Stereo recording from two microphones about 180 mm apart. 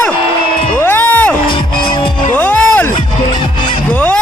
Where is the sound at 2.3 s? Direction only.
10° left (ahead or behind).